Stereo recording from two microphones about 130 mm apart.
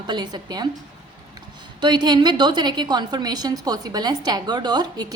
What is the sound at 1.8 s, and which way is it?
A woman's voice, 35° right (ahead or behind).